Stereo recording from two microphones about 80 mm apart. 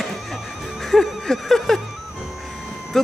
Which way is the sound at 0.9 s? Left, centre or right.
Centre.